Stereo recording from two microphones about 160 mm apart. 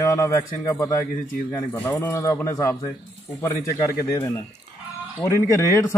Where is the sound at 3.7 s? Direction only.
20° left (ahead or behind).